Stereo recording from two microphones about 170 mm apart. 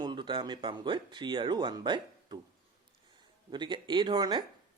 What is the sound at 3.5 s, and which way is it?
Speech, 25° right (ahead or behind).